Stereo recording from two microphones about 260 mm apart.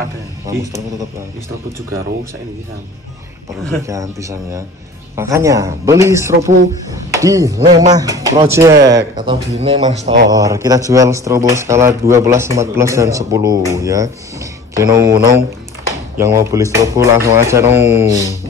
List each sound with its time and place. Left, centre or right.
0.5 s speech: centre
3.8 s speech: centre